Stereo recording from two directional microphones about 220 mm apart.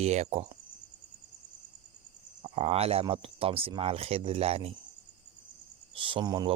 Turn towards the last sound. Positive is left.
turn(degrees=-20)  # may be behind; listen again after turning